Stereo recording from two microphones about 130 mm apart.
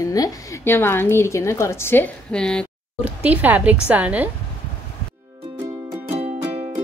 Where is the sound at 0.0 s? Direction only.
30° left (ahead or behind).